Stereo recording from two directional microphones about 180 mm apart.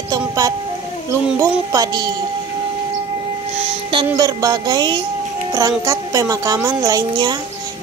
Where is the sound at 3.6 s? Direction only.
30° right (ahead or behind).